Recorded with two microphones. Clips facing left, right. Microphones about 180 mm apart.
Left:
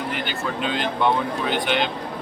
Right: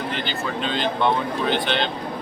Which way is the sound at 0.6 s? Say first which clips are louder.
Even; 5° left (ahead or behind).